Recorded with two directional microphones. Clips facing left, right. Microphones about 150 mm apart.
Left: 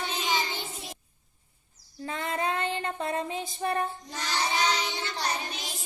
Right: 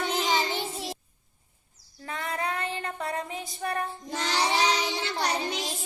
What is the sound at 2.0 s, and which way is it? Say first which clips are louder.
Child singing: left 2 dB; 25° left (ahead or behind).